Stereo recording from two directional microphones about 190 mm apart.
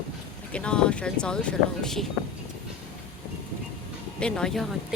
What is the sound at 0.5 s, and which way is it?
Speech, 5° left (ahead or behind).